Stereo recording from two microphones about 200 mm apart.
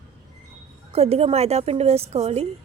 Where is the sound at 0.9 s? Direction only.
30° right (ahead or behind).